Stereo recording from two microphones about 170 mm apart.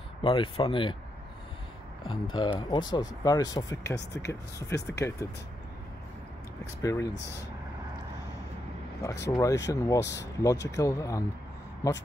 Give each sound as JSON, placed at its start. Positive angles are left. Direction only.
{"t": 0.2, "sound": "speech", "side_deg": 30}
{"t": 2.0, "sound": "speech", "side_deg": 25}
{"t": 6.8, "sound": "speech", "side_deg": 20}
{"t": 9.2, "sound": "speech", "side_deg": 20}
{"t": 10.0, "sound": "speech", "side_deg": 90}
{"t": 10.4, "sound": "speech", "side_deg": 20}